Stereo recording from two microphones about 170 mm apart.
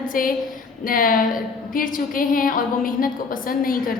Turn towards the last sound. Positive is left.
turn(degrees=55)  # may be behind; listen again after turning